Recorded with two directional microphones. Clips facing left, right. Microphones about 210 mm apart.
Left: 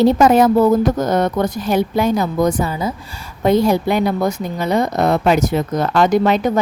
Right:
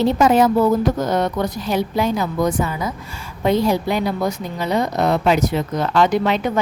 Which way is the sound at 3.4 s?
45° left (ahead or behind).